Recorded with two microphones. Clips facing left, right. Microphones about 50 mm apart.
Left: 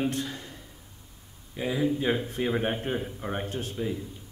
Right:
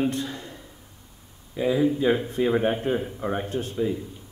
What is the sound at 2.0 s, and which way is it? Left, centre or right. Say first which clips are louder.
Speech: right 5 dB; centre.